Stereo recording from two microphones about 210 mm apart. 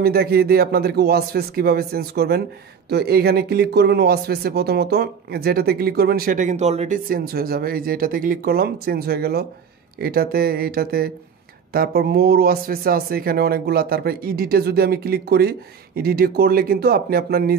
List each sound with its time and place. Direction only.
0.0 s speech: 45° right (ahead or behind); by 7.0 s 30° right (ahead or behind)
7.1 s speech: 45° right (ahead or behind)